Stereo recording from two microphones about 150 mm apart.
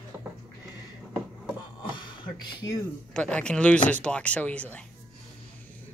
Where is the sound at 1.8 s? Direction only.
30° left (ahead or behind).